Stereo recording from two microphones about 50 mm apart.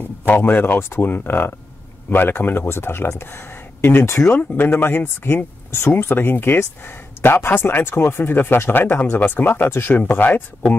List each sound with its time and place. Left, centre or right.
0.3 s speech: left
0.7 s speech: left
1.0 s speech: left
4.7 s speech: left
5.0 s speech: left